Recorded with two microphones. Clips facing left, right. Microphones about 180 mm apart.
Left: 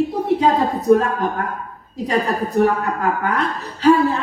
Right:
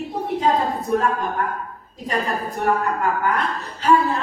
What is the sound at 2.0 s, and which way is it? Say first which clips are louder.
A woman's voice: left 5 dB; 70° left (ahead or behind).